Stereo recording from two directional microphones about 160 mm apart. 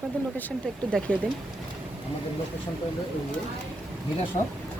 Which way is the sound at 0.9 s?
5° left (ahead or behind).